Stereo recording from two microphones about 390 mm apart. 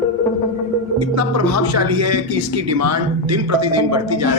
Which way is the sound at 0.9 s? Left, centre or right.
Right.